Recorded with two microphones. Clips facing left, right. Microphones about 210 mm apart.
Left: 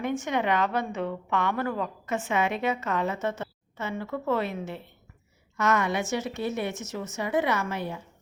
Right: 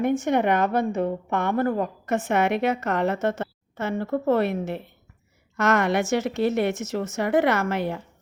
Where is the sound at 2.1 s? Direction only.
70° right (ahead or behind).